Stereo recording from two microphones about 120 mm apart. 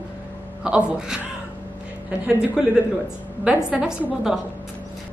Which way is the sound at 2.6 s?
5° right (ahead or behind).